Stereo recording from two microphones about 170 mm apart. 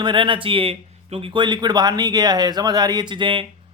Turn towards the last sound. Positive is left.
turn(degrees=-30)  # may be behind; listen again after turning